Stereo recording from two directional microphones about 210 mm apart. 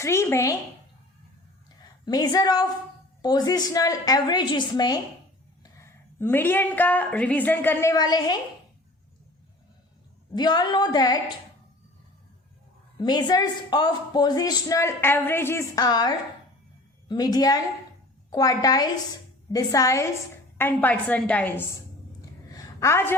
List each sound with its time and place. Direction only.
0.0 s a woman's voice: 10° left (ahead or behind)
2.0 s a woman's voice: 20° left (ahead or behind)
10.3 s speech: 20° left (ahead or behind)
13.0 s a woman's voice: 20° left (ahead or behind)
22.5 s a sound: 15° left (ahead or behind)